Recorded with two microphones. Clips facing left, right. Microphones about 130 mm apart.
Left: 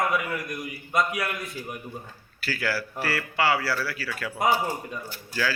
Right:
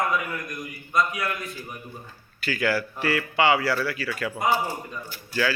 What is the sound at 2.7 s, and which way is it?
Speech, 5° left (ahead or behind).